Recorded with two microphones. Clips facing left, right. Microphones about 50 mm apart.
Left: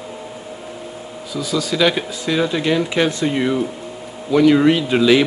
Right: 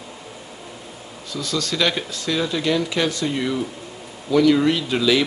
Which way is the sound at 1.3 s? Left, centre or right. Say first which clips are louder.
Left 4 dB; centre.